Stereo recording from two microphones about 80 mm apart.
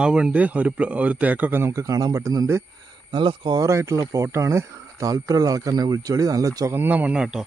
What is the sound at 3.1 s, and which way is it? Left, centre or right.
Speech, right.